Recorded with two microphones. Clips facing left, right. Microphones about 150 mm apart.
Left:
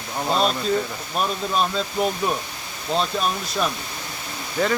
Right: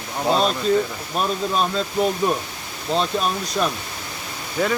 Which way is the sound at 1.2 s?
Centre (ahead or behind).